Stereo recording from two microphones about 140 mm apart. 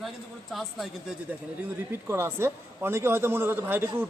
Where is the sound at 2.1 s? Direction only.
15° right (ahead or behind).